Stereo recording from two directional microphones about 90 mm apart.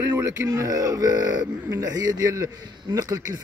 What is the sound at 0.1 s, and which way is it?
Speech, 35° right (ahead or behind).